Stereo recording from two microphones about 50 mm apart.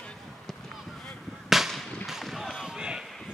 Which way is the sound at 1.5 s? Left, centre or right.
Centre.